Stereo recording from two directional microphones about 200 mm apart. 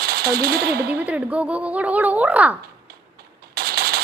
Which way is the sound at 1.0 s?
5° right (ahead or behind).